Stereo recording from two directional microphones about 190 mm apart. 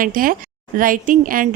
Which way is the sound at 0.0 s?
45° right (ahead or behind).